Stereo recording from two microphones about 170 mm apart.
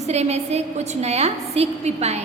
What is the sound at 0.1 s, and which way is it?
A woman's voice, 40° right (ahead or behind).